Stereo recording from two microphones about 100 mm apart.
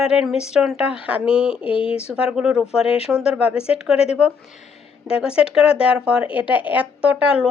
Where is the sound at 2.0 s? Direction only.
10° right (ahead or behind).